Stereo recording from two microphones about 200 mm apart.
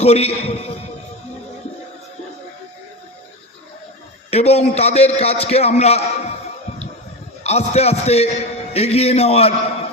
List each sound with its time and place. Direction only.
0.0 s a man's voice: 30° left (ahead or behind)
4.3 s a man's voice: 30° left (ahead or behind)
7.4 s a man's voice: 30° left (ahead or behind)